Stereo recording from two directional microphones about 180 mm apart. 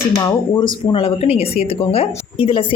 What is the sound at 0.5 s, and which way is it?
Speech, 30° left (ahead or behind).